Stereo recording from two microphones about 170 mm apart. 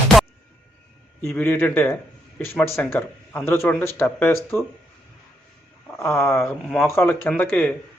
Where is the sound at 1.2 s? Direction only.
15° left (ahead or behind).